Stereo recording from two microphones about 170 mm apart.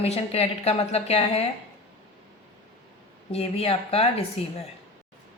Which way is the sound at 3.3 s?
35° left (ahead or behind).